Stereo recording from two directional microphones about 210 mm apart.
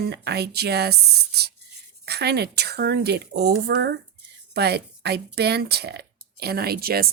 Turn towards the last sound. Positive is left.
turn(degrees=-45)  # may be behind; listen again after turning